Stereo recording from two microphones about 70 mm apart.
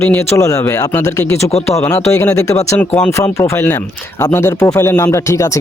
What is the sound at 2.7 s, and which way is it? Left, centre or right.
Speech, left.